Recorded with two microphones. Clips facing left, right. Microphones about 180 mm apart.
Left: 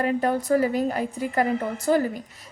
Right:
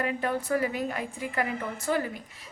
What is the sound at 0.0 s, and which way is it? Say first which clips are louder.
A woman's voice: left 6 dB; 40° left (ahead or behind).